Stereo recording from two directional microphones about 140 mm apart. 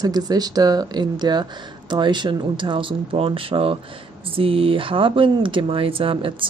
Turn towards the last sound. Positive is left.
turn(degrees=-40)  # may be behind; listen again after turning